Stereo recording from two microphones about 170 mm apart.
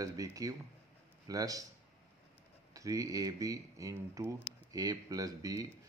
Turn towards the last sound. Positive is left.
turn(degrees=-20)  # may be behind; listen again after turning